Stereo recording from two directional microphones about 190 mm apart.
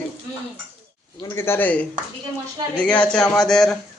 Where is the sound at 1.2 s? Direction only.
10° left (ahead or behind).